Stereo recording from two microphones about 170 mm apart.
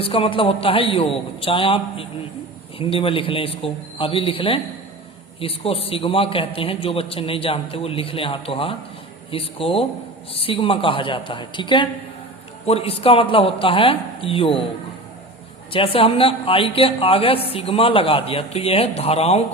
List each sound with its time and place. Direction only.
0.0 s a woman's voice: 35° left (ahead or behind)
15.7 s a woman's voice: 35° left (ahead or behind)